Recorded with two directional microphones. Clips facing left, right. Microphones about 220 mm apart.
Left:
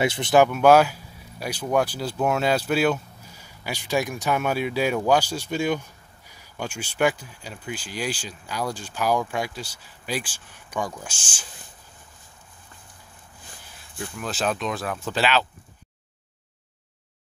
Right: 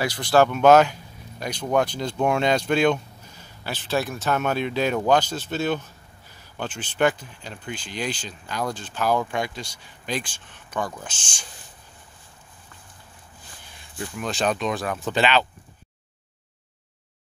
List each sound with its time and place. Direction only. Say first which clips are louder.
0.0 s speech: left 1 dB; 25° left (ahead or behind)
0.5 s speech: right 1 dB; 10° left (ahead or behind)
13.9 s speech: right 2 dB; centre (ahead or behind)